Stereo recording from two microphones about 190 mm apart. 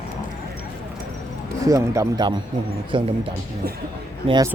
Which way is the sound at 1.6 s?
15° right (ahead or behind).